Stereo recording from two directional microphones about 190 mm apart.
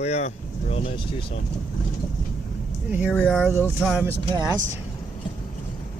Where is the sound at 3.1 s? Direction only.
5° left (ahead or behind).